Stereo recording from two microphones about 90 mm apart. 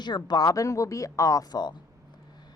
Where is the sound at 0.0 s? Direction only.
55° left (ahead or behind).